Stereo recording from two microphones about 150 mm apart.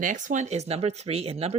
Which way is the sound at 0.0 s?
60° right (ahead or behind).